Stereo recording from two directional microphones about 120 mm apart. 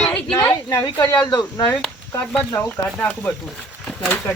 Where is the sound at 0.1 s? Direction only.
15° left (ahead or behind).